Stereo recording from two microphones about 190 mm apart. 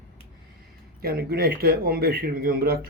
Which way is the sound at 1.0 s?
50° right (ahead or behind).